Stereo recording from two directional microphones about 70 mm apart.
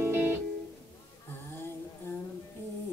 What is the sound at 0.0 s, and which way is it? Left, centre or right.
Music, right.